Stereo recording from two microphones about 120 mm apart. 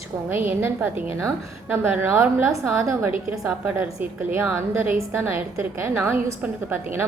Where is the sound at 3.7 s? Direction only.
15° right (ahead or behind).